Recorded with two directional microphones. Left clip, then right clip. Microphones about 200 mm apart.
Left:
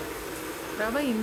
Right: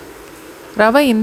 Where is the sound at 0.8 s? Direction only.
45° right (ahead or behind).